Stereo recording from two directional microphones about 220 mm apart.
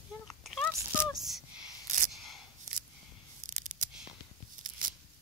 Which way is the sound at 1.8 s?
35° right (ahead or behind).